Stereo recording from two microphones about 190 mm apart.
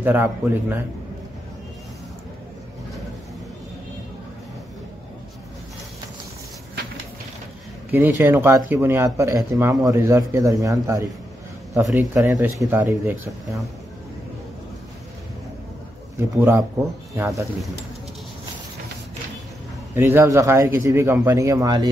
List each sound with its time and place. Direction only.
0.0 s speech: 10° right (ahead or behind)
7.9 s speech: 10° right (ahead or behind)
16.2 s speech: 15° right (ahead or behind)
19.9 s speech: 15° right (ahead or behind)